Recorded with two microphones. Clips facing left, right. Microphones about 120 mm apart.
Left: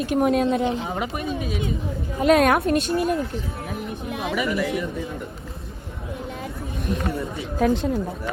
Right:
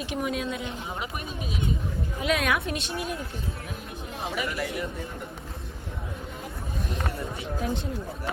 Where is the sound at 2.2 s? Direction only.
45° left (ahead or behind).